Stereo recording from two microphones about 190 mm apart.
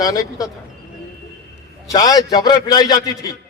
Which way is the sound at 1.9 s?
20° left (ahead or behind).